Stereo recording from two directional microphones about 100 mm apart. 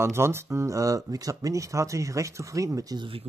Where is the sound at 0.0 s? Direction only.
25° right (ahead or behind).